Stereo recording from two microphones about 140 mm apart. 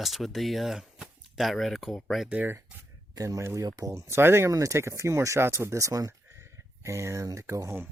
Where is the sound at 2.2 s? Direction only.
15° right (ahead or behind).